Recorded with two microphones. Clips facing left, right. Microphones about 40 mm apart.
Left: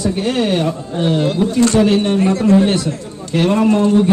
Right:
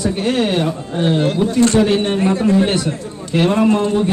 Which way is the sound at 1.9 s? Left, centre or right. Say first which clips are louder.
Left 2 dB; right.